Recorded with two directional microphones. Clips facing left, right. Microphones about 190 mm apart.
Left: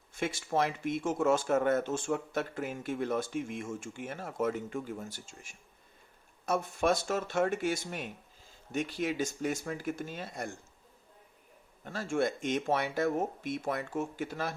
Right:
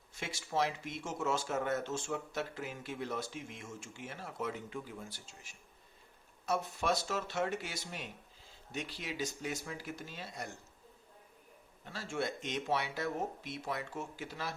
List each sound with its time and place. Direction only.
0.1 s speech: 50° left (ahead or behind)
11.9 s speech: 50° left (ahead or behind)